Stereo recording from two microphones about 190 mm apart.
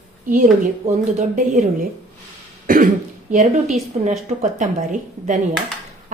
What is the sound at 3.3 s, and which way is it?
A woman's voice, 40° right (ahead or behind).